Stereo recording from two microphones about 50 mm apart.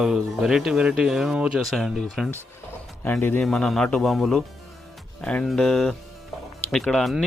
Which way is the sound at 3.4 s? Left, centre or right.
Centre.